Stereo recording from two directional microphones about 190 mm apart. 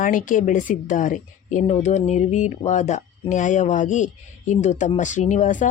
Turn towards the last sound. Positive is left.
turn(degrees=40)  # may be behind; listen again after turning